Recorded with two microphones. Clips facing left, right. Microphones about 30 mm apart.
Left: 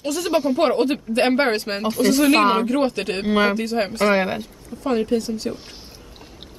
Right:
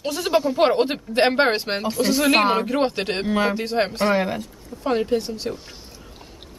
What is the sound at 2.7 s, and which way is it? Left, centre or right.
Speech, centre.